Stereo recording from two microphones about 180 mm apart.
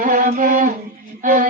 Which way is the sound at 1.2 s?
45° right (ahead or behind).